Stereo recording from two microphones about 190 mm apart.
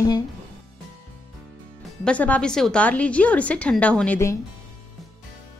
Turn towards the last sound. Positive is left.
turn(degrees=10)  # may be behind; listen again after turning